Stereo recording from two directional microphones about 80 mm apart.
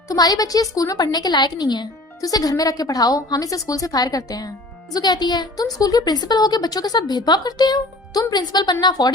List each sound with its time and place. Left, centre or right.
0.1 s a woman's voice: left
5.7 s speech: left